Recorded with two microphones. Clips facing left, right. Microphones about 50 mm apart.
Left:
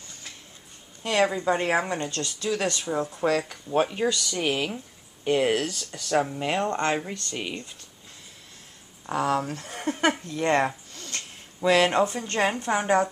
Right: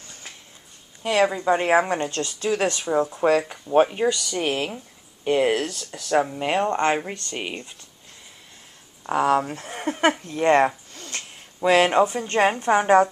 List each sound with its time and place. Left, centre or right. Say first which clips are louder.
1.0 s speech: right 3 dB; centre
1.7 s speech: right 6 dB; right
9.0 s speech: right 5 dB; right